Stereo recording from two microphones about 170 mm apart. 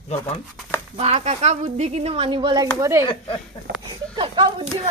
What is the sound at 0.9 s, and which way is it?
A woman's voice, 40° right (ahead or behind).